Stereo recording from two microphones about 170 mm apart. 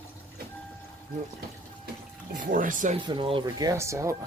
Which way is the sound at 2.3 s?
55° right (ahead or behind).